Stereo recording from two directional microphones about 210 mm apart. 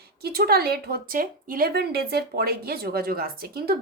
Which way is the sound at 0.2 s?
50° right (ahead or behind).